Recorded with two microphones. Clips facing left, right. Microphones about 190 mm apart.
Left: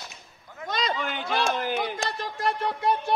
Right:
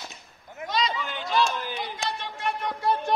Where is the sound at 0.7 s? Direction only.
50° left (ahead or behind).